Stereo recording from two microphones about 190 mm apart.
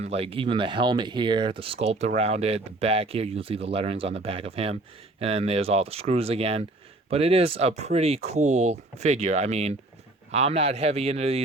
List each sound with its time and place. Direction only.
0.0 s speech: 30° right (ahead or behind)